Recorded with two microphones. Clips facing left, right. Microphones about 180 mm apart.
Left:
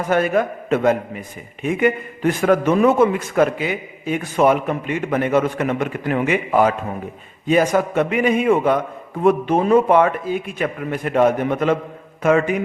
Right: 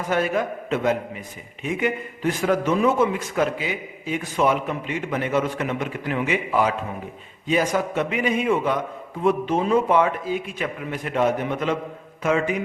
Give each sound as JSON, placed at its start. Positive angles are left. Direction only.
{"t": 0.1, "sound": "a man's voice", "side_deg": 55}